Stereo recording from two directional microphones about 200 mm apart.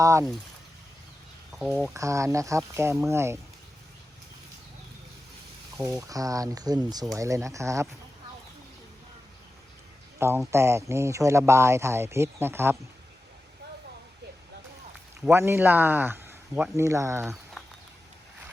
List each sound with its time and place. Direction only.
0.0 s speech: 15° right (ahead or behind)
1.5 s speech: centre (ahead or behind)
1.9 s speech: 15° right (ahead or behind)
5.7 s speech: 15° right (ahead or behind)
10.2 s speech: 10° right (ahead or behind)
15.2 s speech: 10° right (ahead or behind)